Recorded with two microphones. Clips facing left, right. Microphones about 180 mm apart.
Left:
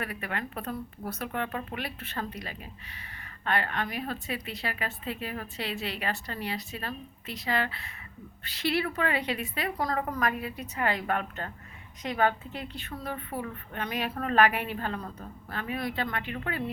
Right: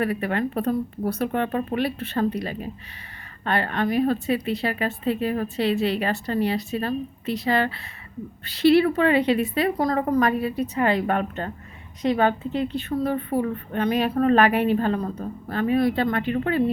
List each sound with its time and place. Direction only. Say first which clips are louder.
0.0 s a woman's voice: right 11 dB; 30° right (ahead or behind)